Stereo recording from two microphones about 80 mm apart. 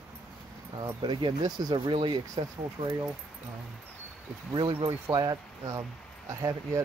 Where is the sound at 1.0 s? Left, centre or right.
Right.